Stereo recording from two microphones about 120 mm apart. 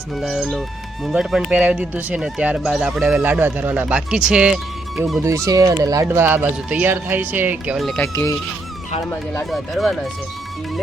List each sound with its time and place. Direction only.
0.2 s speech: centre (ahead or behind)
3.2 s speech: 15° right (ahead or behind)
5.5 s speech: 30° right (ahead or behind)
7.8 s speech: centre (ahead or behind)
8.0 s speech: 25° left (ahead or behind)
9.5 s speech: centre (ahead or behind)